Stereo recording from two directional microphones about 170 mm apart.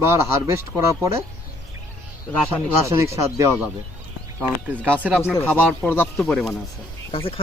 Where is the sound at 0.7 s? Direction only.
10° left (ahead or behind).